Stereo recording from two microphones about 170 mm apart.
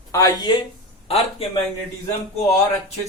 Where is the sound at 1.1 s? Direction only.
35° left (ahead or behind).